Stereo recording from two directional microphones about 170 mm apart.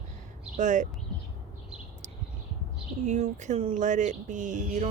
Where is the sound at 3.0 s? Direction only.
45° right (ahead or behind).